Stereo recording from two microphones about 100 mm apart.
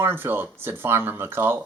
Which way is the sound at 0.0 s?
20° right (ahead or behind).